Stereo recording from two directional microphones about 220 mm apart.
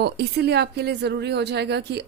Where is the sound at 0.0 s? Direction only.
50° right (ahead or behind).